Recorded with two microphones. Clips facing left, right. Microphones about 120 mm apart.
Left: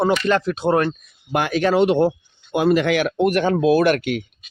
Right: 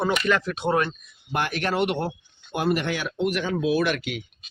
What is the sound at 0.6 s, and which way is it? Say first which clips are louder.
Speech: left 5 dB; 55° left (ahead or behind).